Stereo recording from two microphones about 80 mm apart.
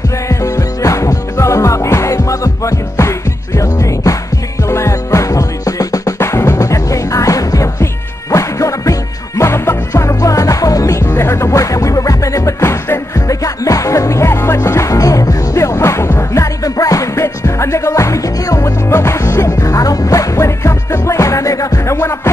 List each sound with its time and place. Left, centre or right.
0.3 s music: left
6.1 s music: left
21.9 s music: left